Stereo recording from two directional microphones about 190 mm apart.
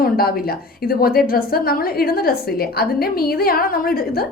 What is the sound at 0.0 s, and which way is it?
A woman's voice, 50° left (ahead or behind).